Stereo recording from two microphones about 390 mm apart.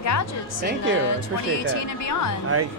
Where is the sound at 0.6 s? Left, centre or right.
Right.